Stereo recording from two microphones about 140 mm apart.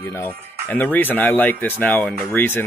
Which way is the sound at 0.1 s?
15° left (ahead or behind).